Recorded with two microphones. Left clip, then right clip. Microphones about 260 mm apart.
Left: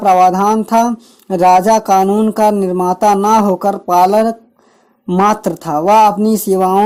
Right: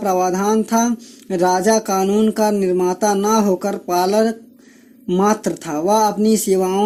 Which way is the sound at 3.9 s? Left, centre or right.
Left.